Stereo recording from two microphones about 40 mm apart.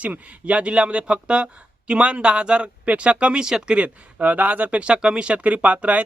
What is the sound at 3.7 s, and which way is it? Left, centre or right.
Speech, right.